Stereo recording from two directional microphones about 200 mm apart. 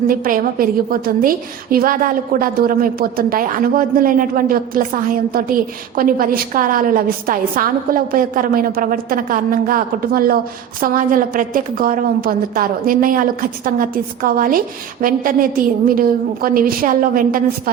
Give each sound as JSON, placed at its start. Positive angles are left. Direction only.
{"t": 0.1, "sound": "a woman's voice", "side_deg": -45}